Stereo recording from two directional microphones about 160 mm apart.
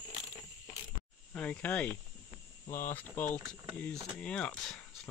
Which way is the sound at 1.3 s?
10° left (ahead or behind).